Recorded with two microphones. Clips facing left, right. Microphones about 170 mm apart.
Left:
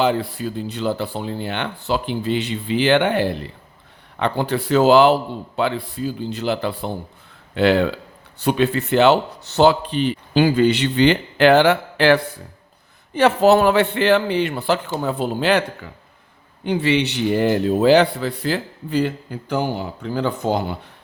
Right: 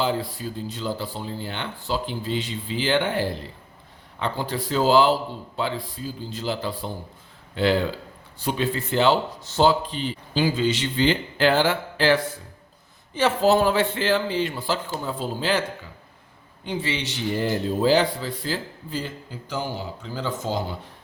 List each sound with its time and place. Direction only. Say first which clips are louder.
0.0 s a man's voice: left 6 dB; 65° left (ahead or behind)